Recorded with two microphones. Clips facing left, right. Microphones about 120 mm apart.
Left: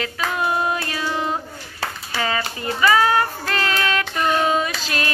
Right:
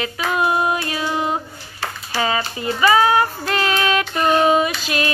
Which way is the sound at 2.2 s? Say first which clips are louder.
Right 3 dB; 20° right (ahead or behind).